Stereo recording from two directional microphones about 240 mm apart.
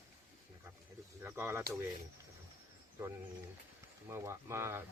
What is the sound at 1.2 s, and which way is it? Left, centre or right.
Speech, centre.